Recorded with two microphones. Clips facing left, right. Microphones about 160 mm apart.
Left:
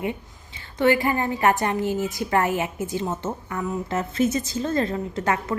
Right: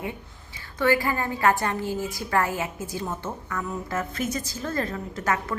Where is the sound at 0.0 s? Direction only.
20° left (ahead or behind).